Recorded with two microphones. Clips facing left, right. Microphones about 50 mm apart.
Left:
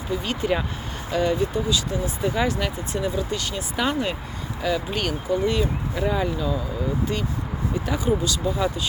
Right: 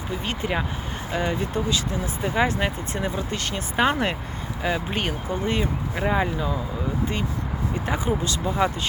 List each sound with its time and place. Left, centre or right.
0.4 s speech: right
7.9 s speech: right